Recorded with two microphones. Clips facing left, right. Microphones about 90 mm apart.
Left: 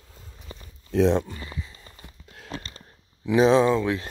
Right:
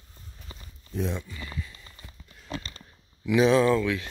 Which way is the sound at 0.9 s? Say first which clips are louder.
Left 11 dB; 85° left.